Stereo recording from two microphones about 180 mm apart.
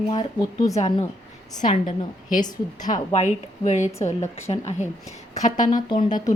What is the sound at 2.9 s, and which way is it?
A woman's voice, 40° left (ahead or behind).